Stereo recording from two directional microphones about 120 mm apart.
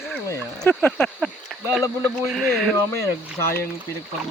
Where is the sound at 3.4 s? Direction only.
20° left (ahead or behind).